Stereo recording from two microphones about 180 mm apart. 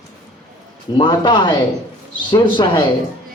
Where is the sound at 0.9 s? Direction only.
25° left (ahead or behind).